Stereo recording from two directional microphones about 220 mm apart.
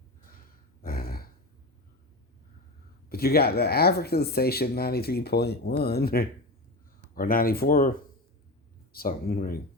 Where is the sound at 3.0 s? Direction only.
45° left (ahead or behind).